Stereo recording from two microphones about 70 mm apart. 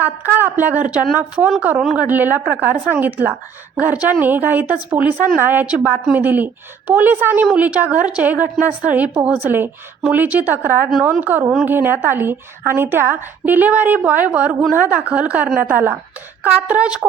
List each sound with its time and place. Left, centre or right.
0.0 s a woman's voice: right
5.1 s speech: centre
5.4 s a woman's voice: right